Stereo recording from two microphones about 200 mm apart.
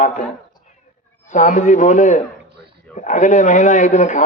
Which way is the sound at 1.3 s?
40° left (ahead or behind).